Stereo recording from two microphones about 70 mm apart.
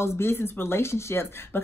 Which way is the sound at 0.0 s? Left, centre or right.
Left.